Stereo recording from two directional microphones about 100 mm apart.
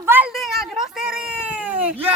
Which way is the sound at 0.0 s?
20° right (ahead or behind).